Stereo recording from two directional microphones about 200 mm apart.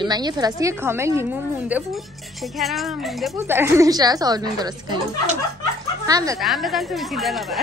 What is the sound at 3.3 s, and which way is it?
A woman's voice, 10° right (ahead or behind).